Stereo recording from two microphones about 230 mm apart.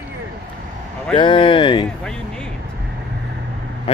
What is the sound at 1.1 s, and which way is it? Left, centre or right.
Speech, left.